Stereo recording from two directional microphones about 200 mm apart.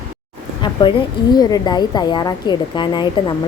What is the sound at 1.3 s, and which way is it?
Speech, 20° left (ahead or behind).